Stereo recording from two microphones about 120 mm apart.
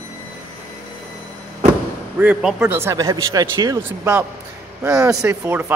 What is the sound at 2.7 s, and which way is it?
Speech, 20° right (ahead or behind).